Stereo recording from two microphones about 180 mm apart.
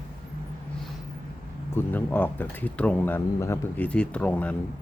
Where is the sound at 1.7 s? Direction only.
10° left (ahead or behind).